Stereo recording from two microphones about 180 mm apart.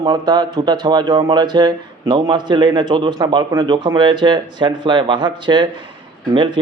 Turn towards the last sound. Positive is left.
turn(degrees=-25)  # may be behind; listen again after turning